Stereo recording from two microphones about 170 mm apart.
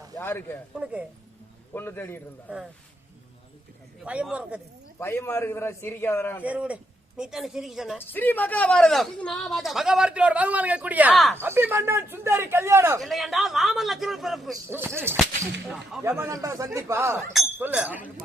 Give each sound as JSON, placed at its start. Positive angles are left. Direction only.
{"t": 0.2, "sound": "a man's voice", "side_deg": 15}
{"t": 1.7, "sound": "a man's voice", "side_deg": 15}
{"t": 4.0, "sound": "a man's voice", "side_deg": -5}
{"t": 4.9, "sound": "a man's voice", "side_deg": 15}
{"t": 6.4, "sound": "a man's voice", "side_deg": -10}
{"t": 7.9, "sound": "speech", "side_deg": 10}
{"t": 11.3, "sound": "a man's voice", "side_deg": -15}
{"t": 13.0, "sound": "speech", "side_deg": 0}
{"t": 15.1, "sound": "a man's voice", "side_deg": -15}